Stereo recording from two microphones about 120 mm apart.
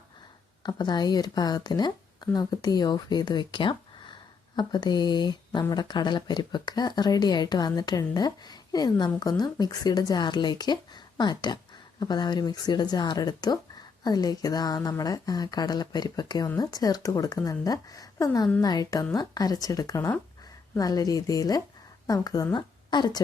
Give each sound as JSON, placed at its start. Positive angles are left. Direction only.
{"t": 0.6, "sound": "a woman's voice", "side_deg": 35}